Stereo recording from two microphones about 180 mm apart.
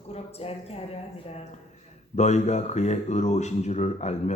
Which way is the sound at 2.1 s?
40° left (ahead or behind).